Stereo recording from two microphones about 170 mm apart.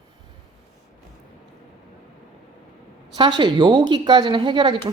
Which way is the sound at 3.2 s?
25° right (ahead or behind).